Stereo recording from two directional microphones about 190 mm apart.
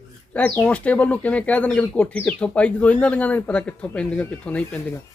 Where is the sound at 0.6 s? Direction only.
5° left (ahead or behind).